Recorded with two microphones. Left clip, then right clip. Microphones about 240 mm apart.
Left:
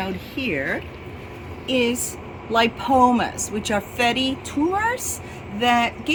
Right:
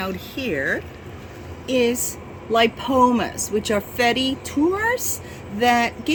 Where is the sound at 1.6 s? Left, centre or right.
Centre.